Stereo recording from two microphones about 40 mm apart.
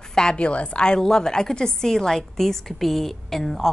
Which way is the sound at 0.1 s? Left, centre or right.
Centre.